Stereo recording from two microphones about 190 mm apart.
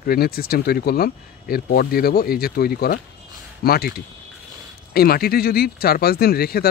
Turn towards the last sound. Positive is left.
turn(degrees=55)  # may be behind; listen again after turning